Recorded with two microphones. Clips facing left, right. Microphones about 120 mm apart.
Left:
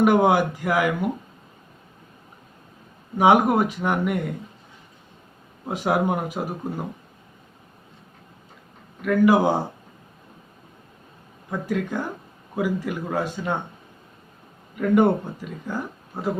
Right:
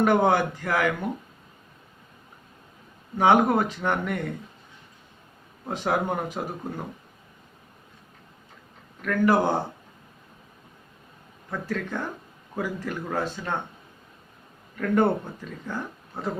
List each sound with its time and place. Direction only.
0.0 s speech: 10° left (ahead or behind)
3.2 s speech: 10° left (ahead or behind)
5.6 s speech: 10° left (ahead or behind)
9.0 s speech: 10° left (ahead or behind)
11.5 s speech: 15° left (ahead or behind)
14.8 s speech: 10° left (ahead or behind)